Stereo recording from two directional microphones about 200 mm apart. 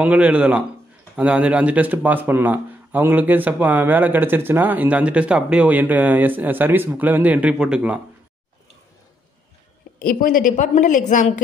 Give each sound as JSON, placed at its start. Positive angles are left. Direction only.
{"t": 0.0, "sound": "speech", "side_deg": -5}
{"t": 9.9, "sound": "a woman's voice", "side_deg": 45}